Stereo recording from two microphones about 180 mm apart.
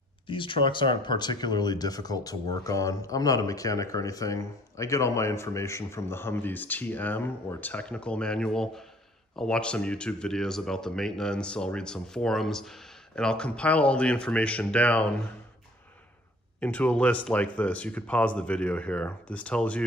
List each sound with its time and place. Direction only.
0.3 s speech: 30° left (ahead or behind); by 15.1 s 5° left (ahead or behind)
16.5 s speech: 10° left (ahead or behind)